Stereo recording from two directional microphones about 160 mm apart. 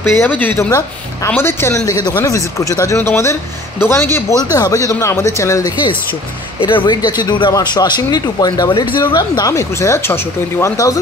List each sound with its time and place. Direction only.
0.0 s speech: 10° left (ahead or behind)
6.6 s speech: 30° left (ahead or behind)